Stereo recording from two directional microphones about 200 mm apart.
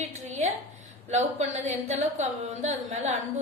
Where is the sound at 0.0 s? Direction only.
35° right (ahead or behind).